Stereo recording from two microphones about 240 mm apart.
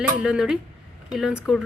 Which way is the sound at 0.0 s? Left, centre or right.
Centre.